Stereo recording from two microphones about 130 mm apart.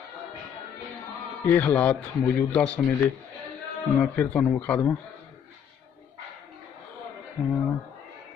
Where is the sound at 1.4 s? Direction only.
15° left (ahead or behind).